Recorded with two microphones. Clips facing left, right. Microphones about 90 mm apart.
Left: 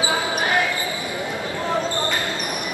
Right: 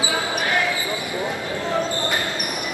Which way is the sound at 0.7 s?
20° right (ahead or behind).